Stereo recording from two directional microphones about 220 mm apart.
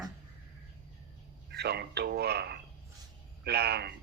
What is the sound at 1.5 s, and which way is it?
Speech, 50° right (ahead or behind).